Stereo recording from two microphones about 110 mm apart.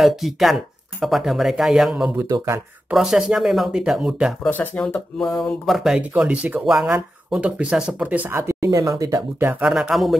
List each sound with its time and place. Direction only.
0.0 s speech: centre (ahead or behind)
2.1 s speech: 25° right (ahead or behind)
2.9 s speech: 5° right (ahead or behind)
4.5 s speech: 15° left (ahead or behind)
5.4 s speech: centre (ahead or behind)
8.3 s speech: 25° right (ahead or behind)
9.6 s speech: 5° right (ahead or behind)